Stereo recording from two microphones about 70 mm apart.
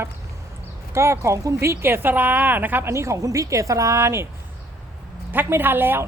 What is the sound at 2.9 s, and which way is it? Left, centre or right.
Speech, right.